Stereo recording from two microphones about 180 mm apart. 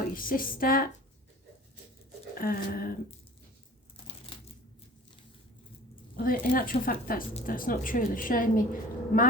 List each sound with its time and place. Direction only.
0.1 s a woman's voice: 50° left (ahead or behind)
2.3 s a woman's voice: 55° left (ahead or behind)
4.3 s a sound: 30° left (ahead or behind)
6.1 s a woman's voice: 50° left (ahead or behind)